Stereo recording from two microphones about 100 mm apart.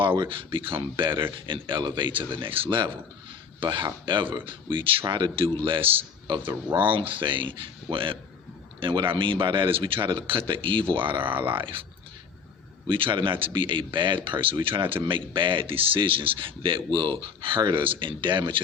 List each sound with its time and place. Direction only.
0.2 s speech: 60° right (ahead or behind)
6.2 s speech: 55° right (ahead or behind)
12.9 s speech: 55° right (ahead or behind)